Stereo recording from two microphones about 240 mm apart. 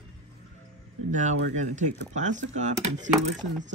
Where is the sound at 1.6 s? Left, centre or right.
Right.